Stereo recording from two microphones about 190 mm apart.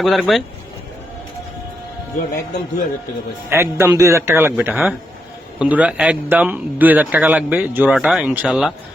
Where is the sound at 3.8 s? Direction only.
15° right (ahead or behind).